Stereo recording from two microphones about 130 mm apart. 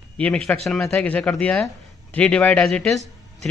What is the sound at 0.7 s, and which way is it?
A man's voice, 5° left (ahead or behind).